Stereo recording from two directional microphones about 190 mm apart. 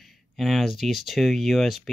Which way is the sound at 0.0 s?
Centre (ahead or behind).